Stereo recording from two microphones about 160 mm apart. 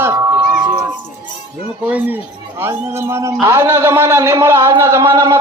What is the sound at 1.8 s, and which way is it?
A man's voice, 10° right (ahead or behind).